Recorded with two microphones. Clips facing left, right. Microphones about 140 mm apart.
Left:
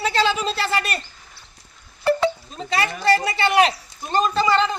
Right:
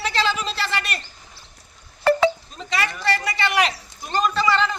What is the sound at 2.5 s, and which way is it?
A man's voice, 30° left (ahead or behind).